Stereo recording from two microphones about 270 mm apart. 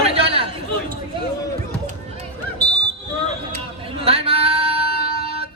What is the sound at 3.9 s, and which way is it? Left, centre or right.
Female singing, right.